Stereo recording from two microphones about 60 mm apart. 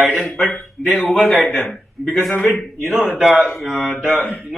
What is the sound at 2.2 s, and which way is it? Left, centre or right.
A man's voice, centre.